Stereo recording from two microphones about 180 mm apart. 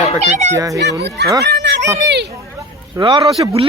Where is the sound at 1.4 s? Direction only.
70° right (ahead or behind).